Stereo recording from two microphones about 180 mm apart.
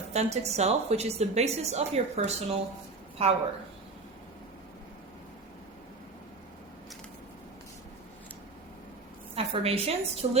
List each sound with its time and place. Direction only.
0.1 s a woman's voice: 35° right (ahead or behind)
9.3 s a woman's voice: 30° right (ahead or behind)